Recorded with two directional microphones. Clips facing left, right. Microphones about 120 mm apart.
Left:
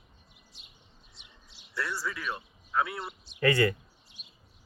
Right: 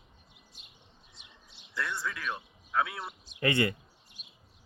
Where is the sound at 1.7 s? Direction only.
5° left (ahead or behind).